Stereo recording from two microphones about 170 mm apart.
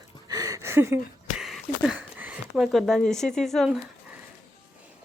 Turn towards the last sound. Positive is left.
turn(degrees=0)  # may be behind; listen again after turning